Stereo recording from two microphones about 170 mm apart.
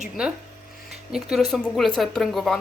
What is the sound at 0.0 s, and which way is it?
A woman's voice, 5° right (ahead or behind).